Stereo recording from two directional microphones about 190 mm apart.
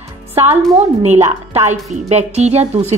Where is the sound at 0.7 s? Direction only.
35° right (ahead or behind).